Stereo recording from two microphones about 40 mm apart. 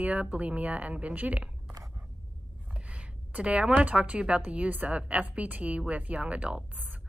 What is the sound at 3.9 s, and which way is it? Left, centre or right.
A woman's voice, right.